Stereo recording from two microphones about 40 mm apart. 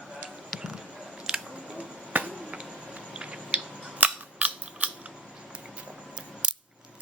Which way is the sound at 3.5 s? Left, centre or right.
Right.